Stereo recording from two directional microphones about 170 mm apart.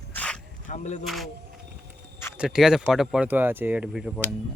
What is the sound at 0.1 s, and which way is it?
Zipper, 5° left (ahead or behind).